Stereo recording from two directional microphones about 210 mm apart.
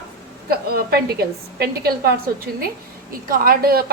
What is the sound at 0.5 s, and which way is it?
A woman's voice, 45° right (ahead or behind).